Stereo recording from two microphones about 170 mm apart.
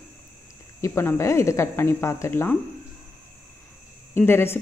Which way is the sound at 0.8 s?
15° left (ahead or behind).